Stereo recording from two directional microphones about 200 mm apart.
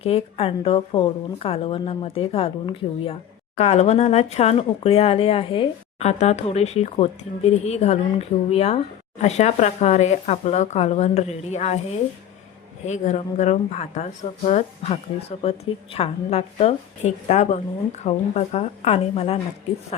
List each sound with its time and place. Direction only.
0.0 s a woman's voice: 30° left (ahead or behind)